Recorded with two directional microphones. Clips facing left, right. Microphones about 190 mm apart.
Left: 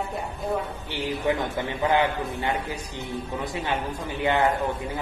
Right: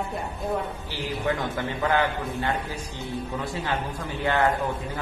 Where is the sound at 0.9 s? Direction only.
20° left (ahead or behind).